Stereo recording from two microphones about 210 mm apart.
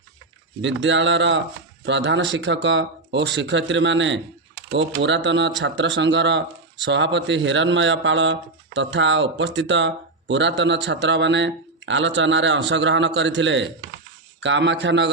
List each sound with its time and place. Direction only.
0.6 s speech: 60° right (ahead or behind)